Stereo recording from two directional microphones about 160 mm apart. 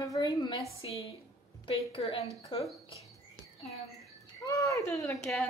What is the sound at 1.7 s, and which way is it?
Speech, 35° left (ahead or behind).